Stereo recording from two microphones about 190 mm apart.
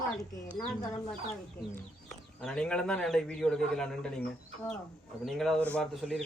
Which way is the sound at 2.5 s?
5° left (ahead or behind).